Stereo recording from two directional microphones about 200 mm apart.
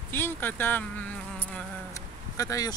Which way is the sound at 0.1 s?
10° left (ahead or behind).